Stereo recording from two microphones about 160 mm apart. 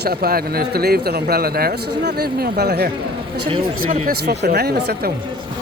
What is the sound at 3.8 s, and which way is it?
Speech, 55° right (ahead or behind).